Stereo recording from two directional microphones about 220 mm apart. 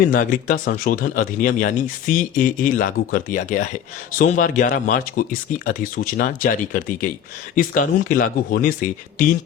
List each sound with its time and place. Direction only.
0.0 s speech: 40° left (ahead or behind)